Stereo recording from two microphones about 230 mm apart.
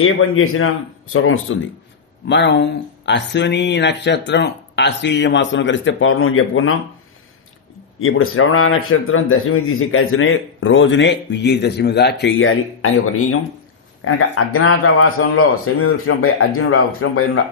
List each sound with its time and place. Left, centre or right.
0.0 s a man's voice: left
2.2 s speech: left
8.0 s a man's voice: left